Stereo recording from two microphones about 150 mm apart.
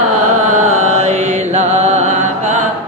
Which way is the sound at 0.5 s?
50° right (ahead or behind).